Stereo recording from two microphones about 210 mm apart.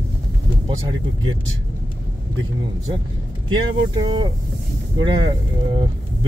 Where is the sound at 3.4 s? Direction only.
20° right (ahead or behind).